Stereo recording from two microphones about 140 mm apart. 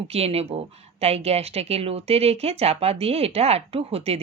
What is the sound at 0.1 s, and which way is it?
A woman's voice, 45° right (ahead or behind).